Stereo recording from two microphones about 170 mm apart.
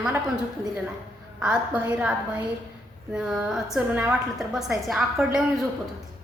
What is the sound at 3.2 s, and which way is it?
A woman's voice, centre (ahead or behind).